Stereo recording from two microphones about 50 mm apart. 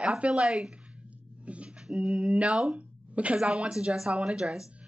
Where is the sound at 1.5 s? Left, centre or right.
Right.